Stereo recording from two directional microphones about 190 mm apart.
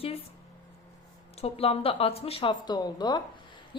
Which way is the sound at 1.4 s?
30° left (ahead or behind).